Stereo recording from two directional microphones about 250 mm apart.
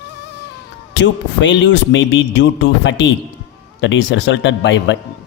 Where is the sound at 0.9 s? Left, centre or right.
Left.